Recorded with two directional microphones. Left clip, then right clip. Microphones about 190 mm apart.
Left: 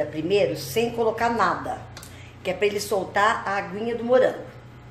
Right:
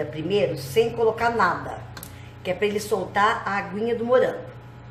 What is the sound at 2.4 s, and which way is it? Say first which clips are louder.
A woman's voice: left 1 dB; 25° left (ahead or behind).